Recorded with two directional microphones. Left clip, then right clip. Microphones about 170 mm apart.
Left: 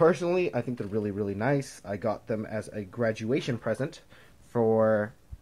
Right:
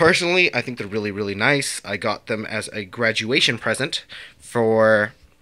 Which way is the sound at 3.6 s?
30° right (ahead or behind).